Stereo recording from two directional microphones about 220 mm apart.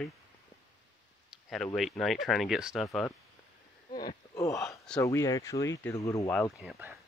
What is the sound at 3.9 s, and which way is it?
Speech, 40° left (ahead or behind).